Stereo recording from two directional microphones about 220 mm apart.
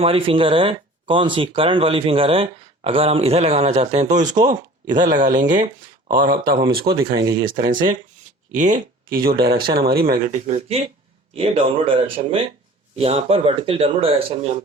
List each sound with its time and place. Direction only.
0.0 s speech: 25° right (ahead or behind); by 6.9 s 45° right (ahead or behind)
7.0 s speech: 15° right (ahead or behind)
8.5 s speech: 35° right (ahead or behind)